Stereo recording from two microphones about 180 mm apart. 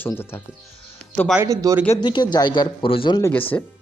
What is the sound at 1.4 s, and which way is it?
Speech, 20° right (ahead or behind).